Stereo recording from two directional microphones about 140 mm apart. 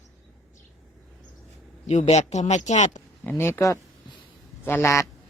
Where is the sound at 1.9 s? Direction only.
55° left (ahead or behind).